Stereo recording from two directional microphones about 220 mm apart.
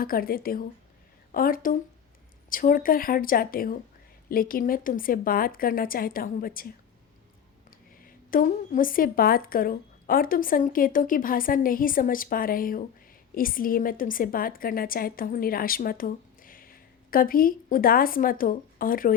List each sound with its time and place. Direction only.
0.0 s a woman's voice: 40° left (ahead or behind)
8.0 s a woman's voice: 40° left (ahead or behind)